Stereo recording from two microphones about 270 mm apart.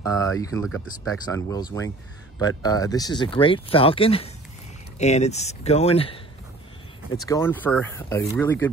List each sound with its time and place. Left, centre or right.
0.0 s speech: centre
7.2 s speech: centre